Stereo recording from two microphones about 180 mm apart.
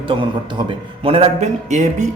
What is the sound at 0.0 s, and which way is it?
A man's voice, 25° right (ahead or behind).